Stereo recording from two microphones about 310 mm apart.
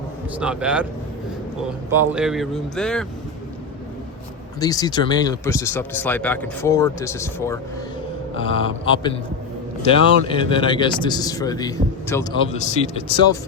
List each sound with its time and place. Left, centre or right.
0.3 s speech: centre
1.9 s speech: centre
4.6 s speech: centre
12.5 s speech: left